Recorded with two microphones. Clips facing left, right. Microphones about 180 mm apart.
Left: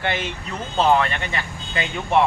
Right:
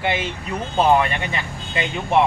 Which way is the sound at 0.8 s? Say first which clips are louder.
Right 1 dB; 10° right (ahead or behind).